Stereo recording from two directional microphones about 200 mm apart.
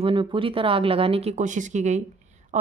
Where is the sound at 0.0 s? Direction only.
25° right (ahead or behind).